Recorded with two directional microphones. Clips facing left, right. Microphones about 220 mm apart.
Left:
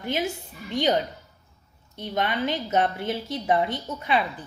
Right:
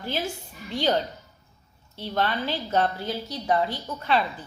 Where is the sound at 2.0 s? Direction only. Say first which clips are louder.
Left 1 dB; 15° left (ahead or behind).